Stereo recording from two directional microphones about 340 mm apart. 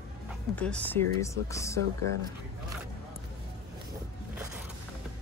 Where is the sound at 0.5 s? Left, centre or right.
Centre.